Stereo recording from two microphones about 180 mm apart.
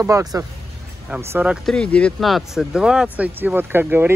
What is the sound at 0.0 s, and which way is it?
Speech, 20° right (ahead or behind).